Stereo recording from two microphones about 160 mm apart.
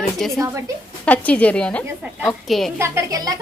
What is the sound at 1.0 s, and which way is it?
A woman's voice, 10° left (ahead or behind).